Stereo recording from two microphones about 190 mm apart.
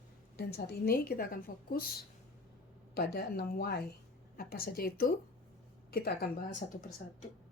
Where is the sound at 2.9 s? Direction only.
55° left (ahead or behind).